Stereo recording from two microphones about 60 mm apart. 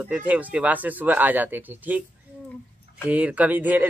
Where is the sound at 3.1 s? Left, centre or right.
Right.